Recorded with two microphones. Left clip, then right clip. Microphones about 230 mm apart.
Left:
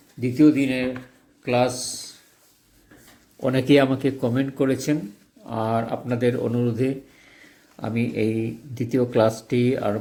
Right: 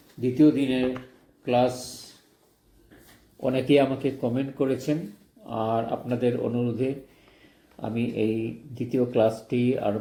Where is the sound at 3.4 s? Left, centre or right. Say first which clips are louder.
Left 3 dB; left.